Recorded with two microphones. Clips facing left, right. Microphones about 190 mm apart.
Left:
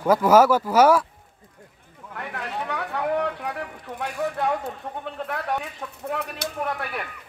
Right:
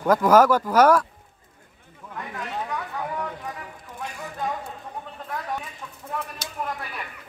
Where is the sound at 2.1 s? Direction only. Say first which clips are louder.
Left 1 dB; 70° left (ahead or behind).